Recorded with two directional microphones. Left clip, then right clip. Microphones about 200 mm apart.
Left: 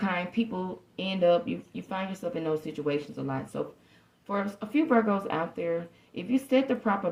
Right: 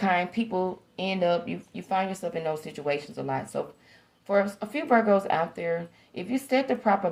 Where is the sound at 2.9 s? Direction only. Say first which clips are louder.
Right 2 dB; 35° right (ahead or behind).